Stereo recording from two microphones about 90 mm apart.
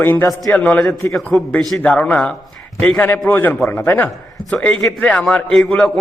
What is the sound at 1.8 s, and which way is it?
Speech, 15° left (ahead or behind).